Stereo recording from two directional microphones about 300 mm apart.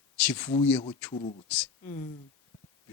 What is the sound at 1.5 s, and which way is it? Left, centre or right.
Speech, centre.